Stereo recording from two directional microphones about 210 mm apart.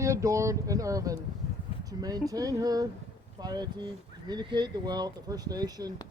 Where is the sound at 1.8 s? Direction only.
15° right (ahead or behind).